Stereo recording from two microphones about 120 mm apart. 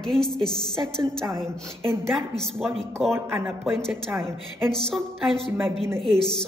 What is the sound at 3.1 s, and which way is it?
A woman's voice, 20° right (ahead or behind).